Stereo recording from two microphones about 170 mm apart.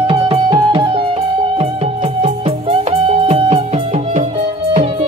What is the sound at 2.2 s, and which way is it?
Music, 35° right (ahead or behind).